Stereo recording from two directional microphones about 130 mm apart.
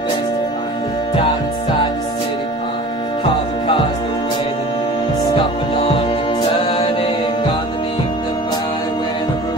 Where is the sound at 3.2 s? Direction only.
35° left (ahead or behind).